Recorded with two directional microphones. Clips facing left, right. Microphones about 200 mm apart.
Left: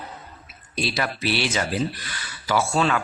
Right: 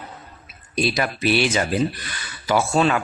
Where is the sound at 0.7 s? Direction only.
15° right (ahead or behind).